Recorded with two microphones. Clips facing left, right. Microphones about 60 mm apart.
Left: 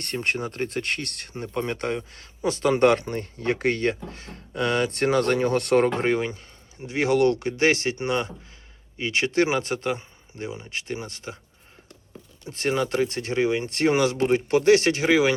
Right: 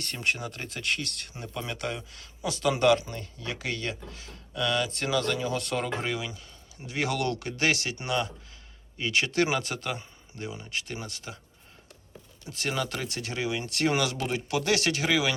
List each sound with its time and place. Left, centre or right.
0.0 s speech: left
12.5 s speech: left